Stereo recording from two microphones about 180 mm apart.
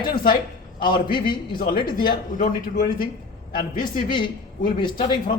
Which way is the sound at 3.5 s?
25° left (ahead or behind).